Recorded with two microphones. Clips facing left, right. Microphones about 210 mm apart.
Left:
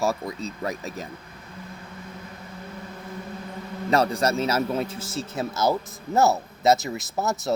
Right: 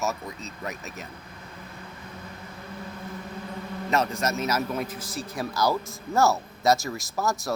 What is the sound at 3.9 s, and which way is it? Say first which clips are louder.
A man's voice: left 4 dB; 30° left (ahead or behind).